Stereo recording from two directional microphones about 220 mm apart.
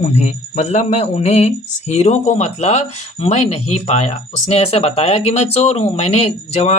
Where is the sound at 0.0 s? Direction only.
30° left (ahead or behind).